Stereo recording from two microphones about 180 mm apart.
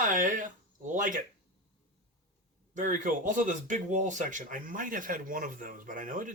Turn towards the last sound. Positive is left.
turn(degrees=-45)  # may be behind; listen again after turning